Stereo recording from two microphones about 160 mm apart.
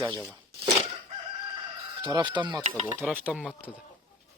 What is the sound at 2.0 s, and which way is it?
Speech, 30° right (ahead or behind).